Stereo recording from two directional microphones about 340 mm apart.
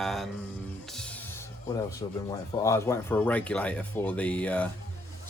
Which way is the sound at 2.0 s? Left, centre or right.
Centre.